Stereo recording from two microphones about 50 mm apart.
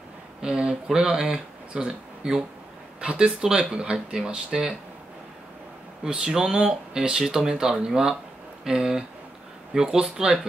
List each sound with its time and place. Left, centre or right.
0.4 s speech: centre
6.0 s speech: centre